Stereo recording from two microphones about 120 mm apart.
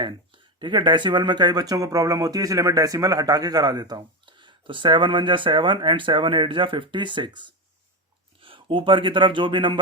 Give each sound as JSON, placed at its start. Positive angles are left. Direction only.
{"t": 0.6, "sound": "speech", "side_deg": -40}